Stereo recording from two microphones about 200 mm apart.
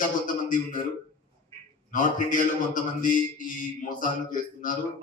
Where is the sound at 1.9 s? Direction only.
40° left (ahead or behind).